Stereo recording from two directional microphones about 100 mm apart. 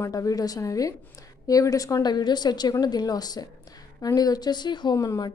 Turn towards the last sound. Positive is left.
turn(degrees=35)  # may be behind; listen again after turning